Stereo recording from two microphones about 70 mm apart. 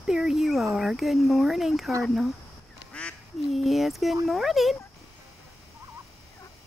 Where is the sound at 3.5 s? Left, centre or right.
Centre.